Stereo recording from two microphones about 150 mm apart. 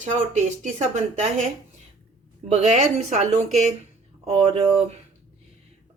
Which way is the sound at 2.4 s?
50° right (ahead or behind).